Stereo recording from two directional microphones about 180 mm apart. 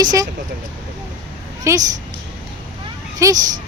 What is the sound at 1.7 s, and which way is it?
Speech, 15° right (ahead or behind).